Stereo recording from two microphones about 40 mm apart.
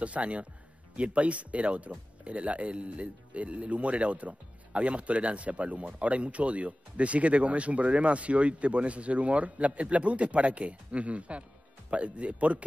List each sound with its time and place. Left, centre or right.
0.0 s speech: right